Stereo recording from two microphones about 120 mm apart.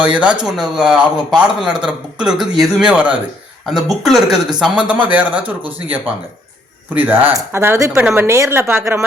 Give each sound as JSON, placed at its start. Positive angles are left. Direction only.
{"t": 0.0, "sound": "a man's voice", "side_deg": -10}
{"t": 6.9, "sound": "speech", "side_deg": -15}